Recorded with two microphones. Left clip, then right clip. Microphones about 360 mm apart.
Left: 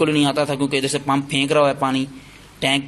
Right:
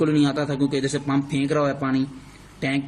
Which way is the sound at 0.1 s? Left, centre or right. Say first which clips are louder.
Left 3 dB; centre.